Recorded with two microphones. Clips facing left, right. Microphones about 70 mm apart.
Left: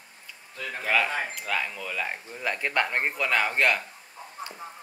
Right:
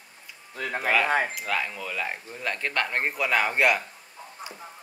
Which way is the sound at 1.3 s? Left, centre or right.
Centre.